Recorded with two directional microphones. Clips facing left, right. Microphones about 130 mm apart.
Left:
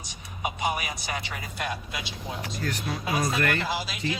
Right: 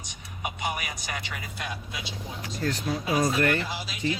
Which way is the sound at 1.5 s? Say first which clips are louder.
Left 6 dB; 60° left (ahead or behind).